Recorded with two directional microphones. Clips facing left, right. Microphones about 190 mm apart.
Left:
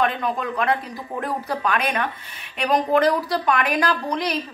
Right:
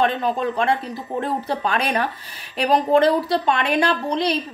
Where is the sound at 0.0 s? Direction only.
30° right (ahead or behind).